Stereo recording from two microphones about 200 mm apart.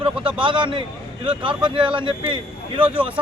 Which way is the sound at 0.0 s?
25° right (ahead or behind).